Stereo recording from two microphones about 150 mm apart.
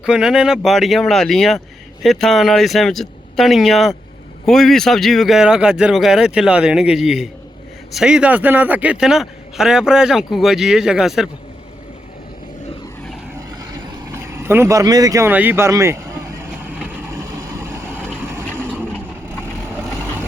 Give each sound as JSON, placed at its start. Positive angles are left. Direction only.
{"t": 0.0, "sound": "a man's voice", "side_deg": -5}
{"t": 14.1, "sound": "vehicle", "side_deg": -15}
{"t": 17.8, "sound": "vehicle", "side_deg": 10}
{"t": 18.2, "sound": "vehicle", "side_deg": -15}
{"t": 18.9, "sound": "vehicle", "side_deg": 10}